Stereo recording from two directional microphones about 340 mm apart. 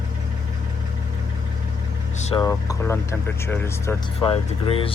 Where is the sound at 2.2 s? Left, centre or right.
Centre.